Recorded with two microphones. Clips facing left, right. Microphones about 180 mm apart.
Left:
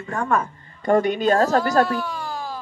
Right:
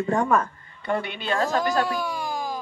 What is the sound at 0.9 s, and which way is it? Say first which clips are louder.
Speech: left 9 dB; 40° left (ahead or behind).